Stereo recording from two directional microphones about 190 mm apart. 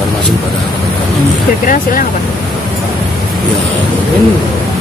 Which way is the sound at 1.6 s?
45° left (ahead or behind).